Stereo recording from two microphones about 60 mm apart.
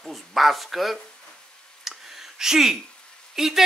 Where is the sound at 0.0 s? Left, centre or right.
Centre.